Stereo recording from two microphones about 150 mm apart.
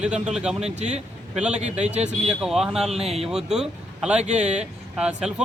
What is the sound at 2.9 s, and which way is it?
Speech, 45° right (ahead or behind).